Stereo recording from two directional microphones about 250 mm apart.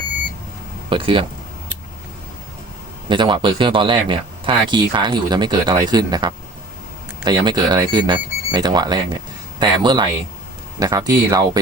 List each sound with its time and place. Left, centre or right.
0.9 s speech: right
3.1 s speech: centre